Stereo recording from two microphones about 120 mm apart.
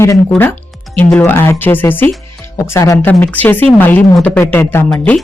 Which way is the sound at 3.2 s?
15° left (ahead or behind).